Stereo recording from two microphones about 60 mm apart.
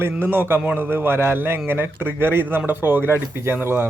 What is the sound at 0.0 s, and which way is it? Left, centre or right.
A man's voice, right.